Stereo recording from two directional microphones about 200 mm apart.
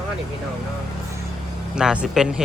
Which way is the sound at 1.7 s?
5° right (ahead or behind).